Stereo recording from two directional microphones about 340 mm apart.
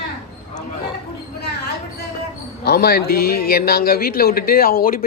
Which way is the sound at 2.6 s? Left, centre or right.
Left.